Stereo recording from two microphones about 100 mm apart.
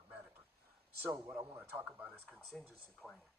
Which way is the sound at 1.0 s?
20° right (ahead or behind).